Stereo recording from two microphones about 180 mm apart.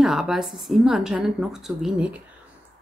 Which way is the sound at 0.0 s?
Centre (ahead or behind).